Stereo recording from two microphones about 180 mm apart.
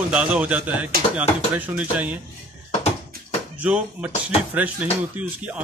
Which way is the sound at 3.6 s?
10° right (ahead or behind).